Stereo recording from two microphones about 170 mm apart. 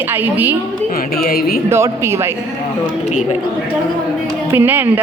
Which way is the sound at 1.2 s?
60° left (ahead or behind).